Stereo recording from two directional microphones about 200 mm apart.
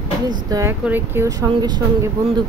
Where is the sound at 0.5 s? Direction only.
15° right (ahead or behind).